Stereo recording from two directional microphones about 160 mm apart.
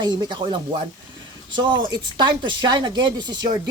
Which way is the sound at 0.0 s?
25° right (ahead or behind).